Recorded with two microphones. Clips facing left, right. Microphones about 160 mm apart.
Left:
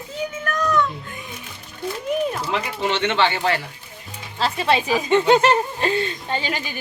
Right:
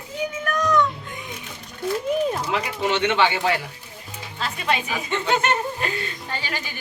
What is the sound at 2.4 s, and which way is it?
Speech, 5° right (ahead or behind).